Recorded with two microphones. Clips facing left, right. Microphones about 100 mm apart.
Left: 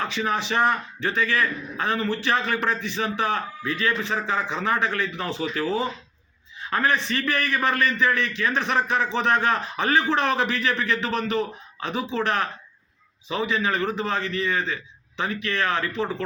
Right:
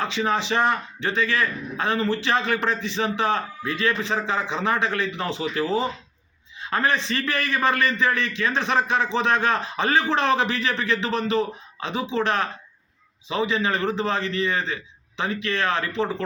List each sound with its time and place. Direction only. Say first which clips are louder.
0.0 s a man's voice: right 2 dB; 30° right (ahead or behind)